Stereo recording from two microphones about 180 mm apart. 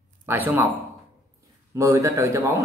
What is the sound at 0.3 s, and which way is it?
Speech, 10° right (ahead or behind).